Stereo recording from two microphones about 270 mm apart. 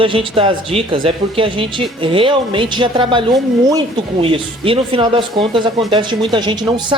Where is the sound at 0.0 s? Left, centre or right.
Centre.